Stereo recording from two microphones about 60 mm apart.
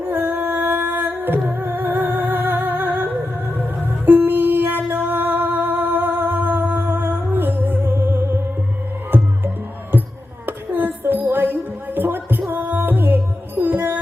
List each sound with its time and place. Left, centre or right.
0.1 s music: right
10.4 s a sound: right
13.6 s music: right